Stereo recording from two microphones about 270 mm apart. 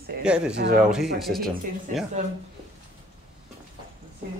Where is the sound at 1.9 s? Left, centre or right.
Right.